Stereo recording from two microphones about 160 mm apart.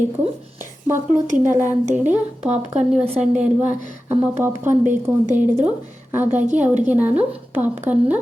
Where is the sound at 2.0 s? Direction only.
10° right (ahead or behind).